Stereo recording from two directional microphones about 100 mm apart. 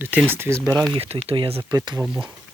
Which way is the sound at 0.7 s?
5° left (ahead or behind).